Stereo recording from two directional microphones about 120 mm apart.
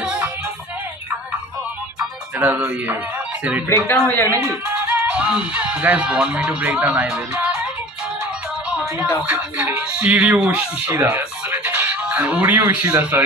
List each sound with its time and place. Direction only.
0.0 s music: 5° right (ahead or behind)
2.4 s speech: 10° right (ahead or behind)
3.6 s speech: 20° left (ahead or behind)
4.5 s speech: 10° right (ahead or behind)
8.6 s music: 10° right (ahead or behind)
9.2 s speech: 15° right (ahead or behind)